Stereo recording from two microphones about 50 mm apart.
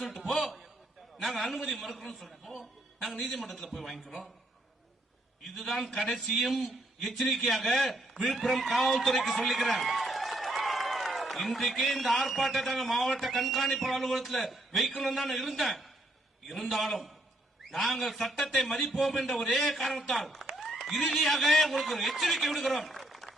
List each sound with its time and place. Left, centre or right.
0.0 s a sound: centre
1.2 s a man's voice: centre
5.5 s a man's voice: centre